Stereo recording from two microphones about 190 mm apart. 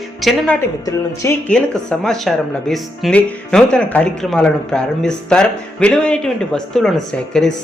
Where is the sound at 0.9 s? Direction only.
15° left (ahead or behind).